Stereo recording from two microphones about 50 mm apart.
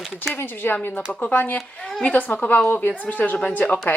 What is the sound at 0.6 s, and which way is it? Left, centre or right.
Speech, left.